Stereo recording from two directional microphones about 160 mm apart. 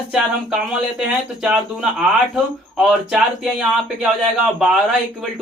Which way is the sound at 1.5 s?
5° right (ahead or behind).